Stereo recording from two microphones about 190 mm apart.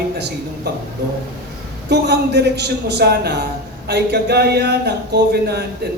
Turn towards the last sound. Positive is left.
turn(degrees=-60)  # may be behind; listen again after turning